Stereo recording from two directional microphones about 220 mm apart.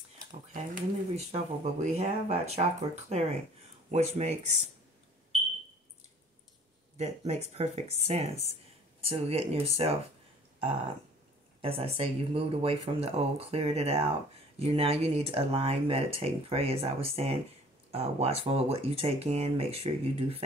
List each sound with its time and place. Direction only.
0.5 s speech: 35° right (ahead or behind)
7.0 s speech: 30° right (ahead or behind)
11.6 s speech: 25° right (ahead or behind)